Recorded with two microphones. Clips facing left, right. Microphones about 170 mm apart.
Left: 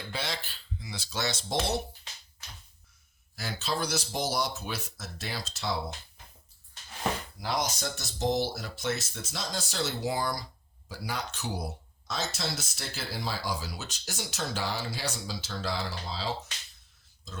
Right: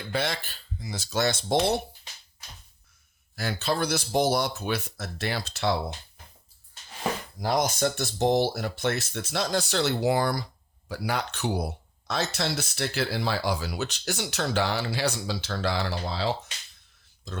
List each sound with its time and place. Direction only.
0.1 s speech: 55° right (ahead or behind)
3.3 s speech: 60° right (ahead or behind)
7.3 s speech: 45° right (ahead or behind); by 17.4 s 65° right (ahead or behind)